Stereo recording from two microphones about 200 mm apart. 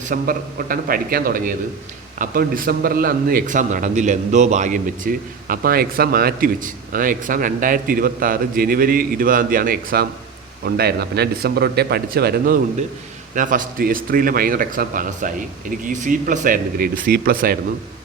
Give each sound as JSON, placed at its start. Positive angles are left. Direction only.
{"t": 0.1, "sound": "a man's voice", "side_deg": -45}